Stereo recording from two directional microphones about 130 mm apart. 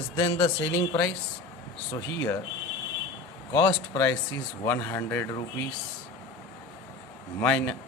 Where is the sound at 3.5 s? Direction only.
35° left (ahead or behind).